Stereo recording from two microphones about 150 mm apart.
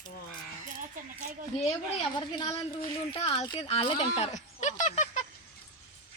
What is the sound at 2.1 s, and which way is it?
A woman's voice, 40° left (ahead or behind).